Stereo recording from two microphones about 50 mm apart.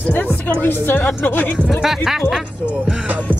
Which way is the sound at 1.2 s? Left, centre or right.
Left.